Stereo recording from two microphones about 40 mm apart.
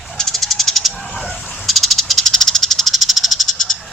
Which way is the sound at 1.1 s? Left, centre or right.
Centre.